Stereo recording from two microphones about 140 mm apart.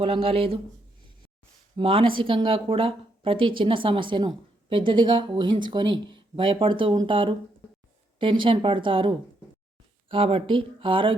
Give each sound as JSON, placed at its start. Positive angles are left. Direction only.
{"t": 0.0, "sound": "speech", "side_deg": -40}
{"t": 1.7, "sound": "speech", "side_deg": -40}